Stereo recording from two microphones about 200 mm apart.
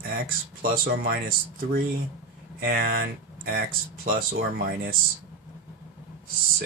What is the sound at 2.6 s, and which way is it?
Speech, 45° right (ahead or behind).